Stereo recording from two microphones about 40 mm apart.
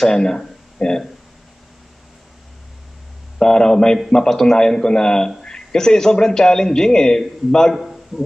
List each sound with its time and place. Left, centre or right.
0.0 s a man's voice: centre
3.3 s a man's voice: centre
7.7 s a sound: centre